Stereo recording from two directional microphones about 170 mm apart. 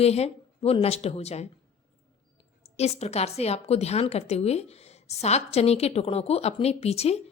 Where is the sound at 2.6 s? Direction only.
40° left (ahead or behind).